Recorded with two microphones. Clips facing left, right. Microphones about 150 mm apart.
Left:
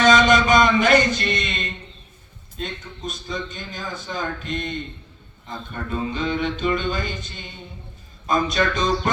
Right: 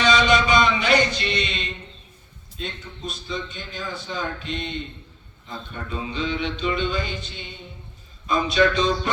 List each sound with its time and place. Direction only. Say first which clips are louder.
0.0 s music: left 3 dB; 45° left (ahead or behind)
2.6 s a man's voice: left 2 dB; 45° left (ahead or behind)